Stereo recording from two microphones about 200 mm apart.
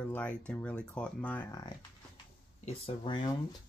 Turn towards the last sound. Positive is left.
turn(degrees=25)  # may be behind; listen again after turning